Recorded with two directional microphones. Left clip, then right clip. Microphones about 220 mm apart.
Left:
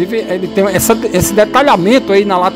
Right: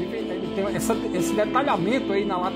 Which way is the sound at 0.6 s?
40° left (ahead or behind).